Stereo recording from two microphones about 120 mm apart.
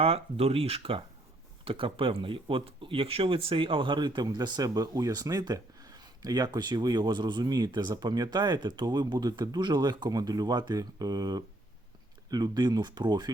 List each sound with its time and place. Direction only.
0.0 s speech: 55° right (ahead or behind); by 13.3 s 35° right (ahead or behind)